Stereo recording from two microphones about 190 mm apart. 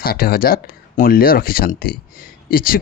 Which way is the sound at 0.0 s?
50° left (ahead or behind).